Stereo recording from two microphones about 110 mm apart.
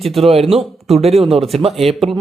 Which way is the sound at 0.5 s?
Centre (ahead or behind).